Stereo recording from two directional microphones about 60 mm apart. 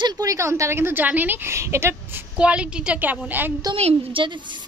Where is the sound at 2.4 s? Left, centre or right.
Centre.